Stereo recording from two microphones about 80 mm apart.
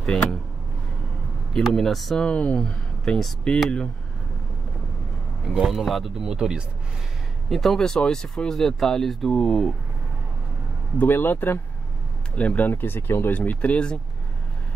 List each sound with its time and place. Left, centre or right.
0.0 s speech: centre
1.5 s speech: centre
2.2 s speech: centre
5.5 s speech: centre
7.4 s speech: centre
11.0 s speech: left